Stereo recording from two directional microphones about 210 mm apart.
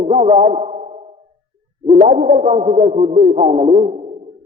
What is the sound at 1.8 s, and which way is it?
Speech, 30° right (ahead or behind).